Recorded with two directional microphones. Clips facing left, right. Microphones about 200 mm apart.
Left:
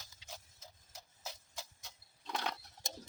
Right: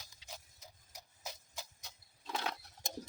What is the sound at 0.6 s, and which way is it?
Horse, 15° right (ahead or behind).